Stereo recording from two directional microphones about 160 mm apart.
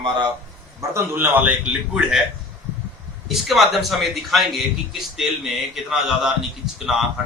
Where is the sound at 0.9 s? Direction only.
15° right (ahead or behind).